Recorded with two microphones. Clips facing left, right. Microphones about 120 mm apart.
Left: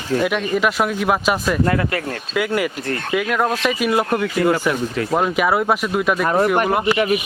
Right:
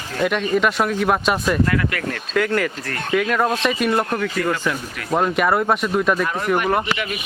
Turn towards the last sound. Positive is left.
turn(degrees=35)  # may be behind; listen again after turning